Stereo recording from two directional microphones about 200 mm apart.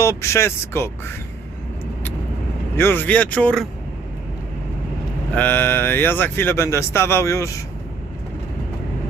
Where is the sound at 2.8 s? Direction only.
10° left (ahead or behind).